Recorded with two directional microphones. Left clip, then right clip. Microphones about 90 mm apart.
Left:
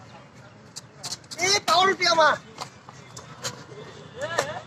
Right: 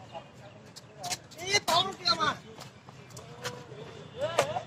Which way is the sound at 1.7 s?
25° left (ahead or behind).